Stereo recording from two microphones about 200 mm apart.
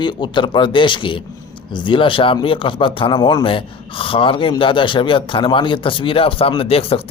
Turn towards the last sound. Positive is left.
turn(degrees=30)  # may be behind; listen again after turning